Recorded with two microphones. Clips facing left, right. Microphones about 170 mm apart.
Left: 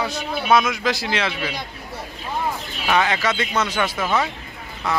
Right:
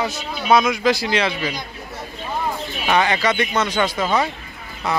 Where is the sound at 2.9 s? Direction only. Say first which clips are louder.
Right 2 dB; centre (ahead or behind).